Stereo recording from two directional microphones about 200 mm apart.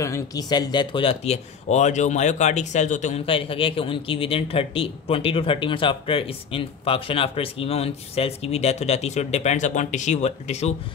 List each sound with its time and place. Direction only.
0.0 s speech: 15° left (ahead or behind); by 10.7 s 35° left (ahead or behind)